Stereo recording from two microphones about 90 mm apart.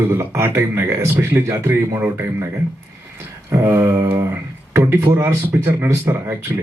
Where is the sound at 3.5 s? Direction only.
30° right (ahead or behind).